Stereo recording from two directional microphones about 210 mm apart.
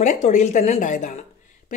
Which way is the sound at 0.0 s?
35° left (ahead or behind).